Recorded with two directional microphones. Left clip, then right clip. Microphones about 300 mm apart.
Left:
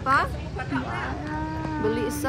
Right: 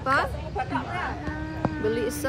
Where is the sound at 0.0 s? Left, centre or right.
Centre.